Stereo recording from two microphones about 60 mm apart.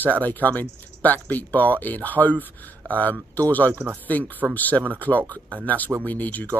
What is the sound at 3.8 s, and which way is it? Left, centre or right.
Speech, centre.